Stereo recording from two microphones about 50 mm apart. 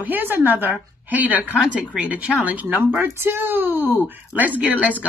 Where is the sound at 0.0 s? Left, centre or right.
Right.